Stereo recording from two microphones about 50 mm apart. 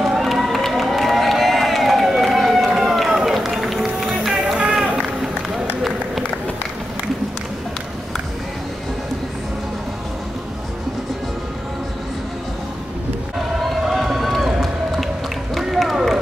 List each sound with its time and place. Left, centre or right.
0.0 s crowd: centre
5.8 s run: centre
13.8 s run: centre